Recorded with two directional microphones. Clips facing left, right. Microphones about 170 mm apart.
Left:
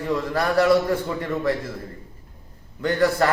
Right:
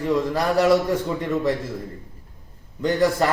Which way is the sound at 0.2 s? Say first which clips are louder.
Left 2 dB; 15° right (ahead or behind).